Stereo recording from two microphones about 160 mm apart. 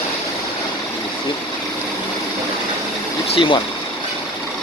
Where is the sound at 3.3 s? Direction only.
30° left (ahead or behind).